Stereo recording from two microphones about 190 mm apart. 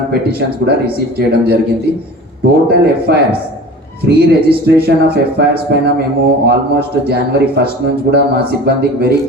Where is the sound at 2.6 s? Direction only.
55° right (ahead or behind).